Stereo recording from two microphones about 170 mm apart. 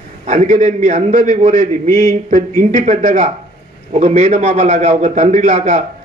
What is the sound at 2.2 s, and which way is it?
A man's voice, 45° right (ahead or behind).